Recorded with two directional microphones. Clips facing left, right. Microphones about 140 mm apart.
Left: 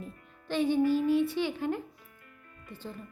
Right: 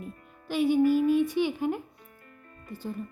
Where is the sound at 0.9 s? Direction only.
15° right (ahead or behind).